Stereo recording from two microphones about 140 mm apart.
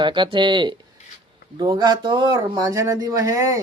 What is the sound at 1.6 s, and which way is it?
Speech, 30° right (ahead or behind).